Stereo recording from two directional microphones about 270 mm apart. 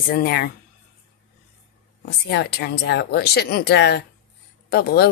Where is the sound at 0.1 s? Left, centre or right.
Left.